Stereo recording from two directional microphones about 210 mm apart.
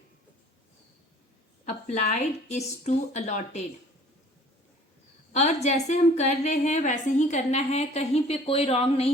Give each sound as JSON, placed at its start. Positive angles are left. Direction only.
{"t": 1.6, "sound": "a woman's voice", "side_deg": 35}
{"t": 5.3, "sound": "a woman's voice", "side_deg": 30}